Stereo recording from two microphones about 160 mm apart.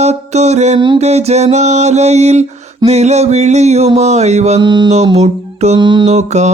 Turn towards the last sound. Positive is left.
turn(degrees=-45)  # may be behind; listen again after turning